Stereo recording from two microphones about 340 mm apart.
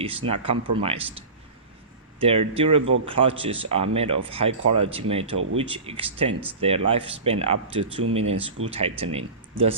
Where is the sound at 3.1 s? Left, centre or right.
Centre.